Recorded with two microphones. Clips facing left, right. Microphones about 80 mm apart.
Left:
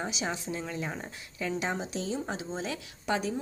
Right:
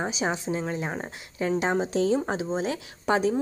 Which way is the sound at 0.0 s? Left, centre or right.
Right.